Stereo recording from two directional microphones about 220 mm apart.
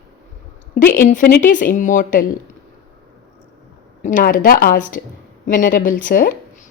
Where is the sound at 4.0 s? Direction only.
35° left (ahead or behind).